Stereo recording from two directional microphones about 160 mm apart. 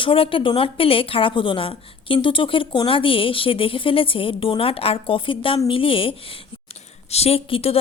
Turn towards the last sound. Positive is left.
turn(degrees=35)  # may be behind; listen again after turning